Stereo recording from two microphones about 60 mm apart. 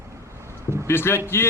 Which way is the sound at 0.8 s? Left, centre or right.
Left.